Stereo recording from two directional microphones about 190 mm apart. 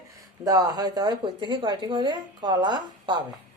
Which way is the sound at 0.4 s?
20° right (ahead or behind).